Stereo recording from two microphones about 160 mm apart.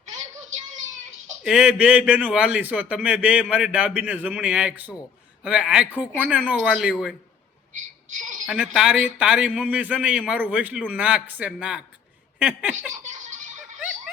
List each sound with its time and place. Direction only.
1.5 s a man's voice: 5° right (ahead or behind)
7.7 s a sound: 50° right (ahead or behind)
8.4 s a man's voice: 5° right (ahead or behind)
12.9 s baby laughter: 50° right (ahead or behind)